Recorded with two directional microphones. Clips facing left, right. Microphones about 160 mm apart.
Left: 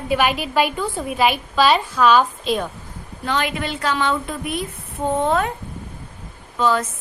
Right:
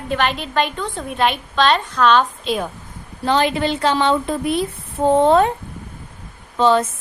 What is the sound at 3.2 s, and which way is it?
A woman's voice, 30° right (ahead or behind).